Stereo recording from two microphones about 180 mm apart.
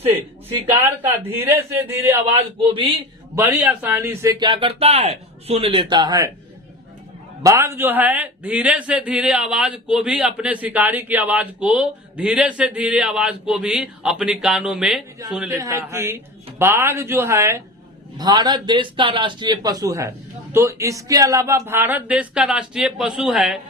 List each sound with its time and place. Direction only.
0.8 s speech: 10° right (ahead or behind)
2.6 s speech: 30° right (ahead or behind)
3.3 s speech: 10° right (ahead or behind)
7.4 s a man's voice: 15° right (ahead or behind)
15.4 s speech: 20° right (ahead or behind); by 23.6 s centre (ahead or behind)